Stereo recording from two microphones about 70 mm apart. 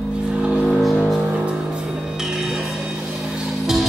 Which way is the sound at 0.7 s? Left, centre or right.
Centre.